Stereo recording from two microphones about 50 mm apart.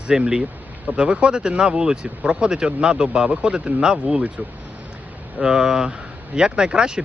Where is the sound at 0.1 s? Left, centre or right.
Centre.